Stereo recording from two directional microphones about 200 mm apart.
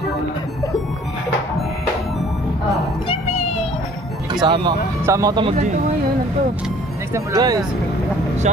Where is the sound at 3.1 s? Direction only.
30° left (ahead or behind).